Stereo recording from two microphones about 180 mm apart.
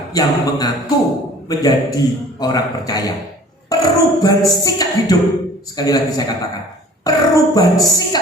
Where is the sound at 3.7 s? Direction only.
20° left (ahead or behind).